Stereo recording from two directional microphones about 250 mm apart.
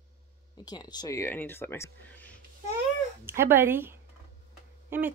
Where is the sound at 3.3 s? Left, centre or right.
Centre.